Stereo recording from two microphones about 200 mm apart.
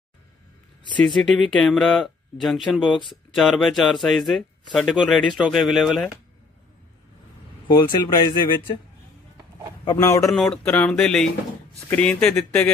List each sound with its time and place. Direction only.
1.0 s speech: centre (ahead or behind)
7.6 s speech: 20° left (ahead or behind)
9.8 s speech: 15° left (ahead or behind)
10.3 s speech: 5° left (ahead or behind)